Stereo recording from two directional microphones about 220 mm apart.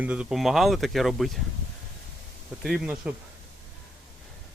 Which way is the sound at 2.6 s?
Centre (ahead or behind).